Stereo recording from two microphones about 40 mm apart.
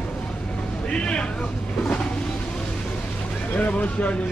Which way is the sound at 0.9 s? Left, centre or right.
Left.